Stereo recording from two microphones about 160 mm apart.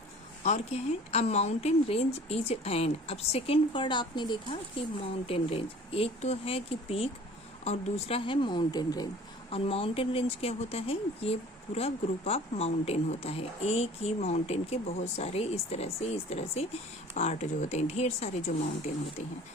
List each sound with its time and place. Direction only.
0.4 s speech: 45° left (ahead or behind); by 9.0 s 25° left (ahead or behind)
9.5 s speech: 35° left (ahead or behind)